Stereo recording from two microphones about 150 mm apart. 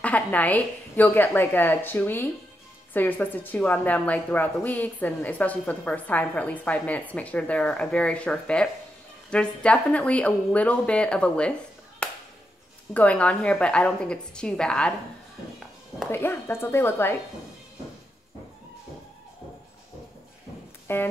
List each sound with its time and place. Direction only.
0.0 s a woman's voice: 10° left (ahead or behind)
12.9 s a woman's voice: 10° left (ahead or behind)
16.1 s a woman's voice: 15° left (ahead or behind)
20.8 s a sound: 15° left (ahead or behind)